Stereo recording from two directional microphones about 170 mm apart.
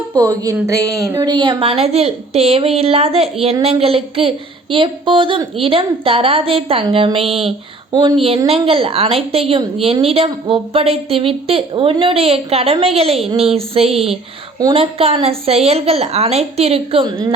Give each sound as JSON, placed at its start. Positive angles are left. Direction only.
{"t": 0.1, "sound": "a woman's voice", "side_deg": -20}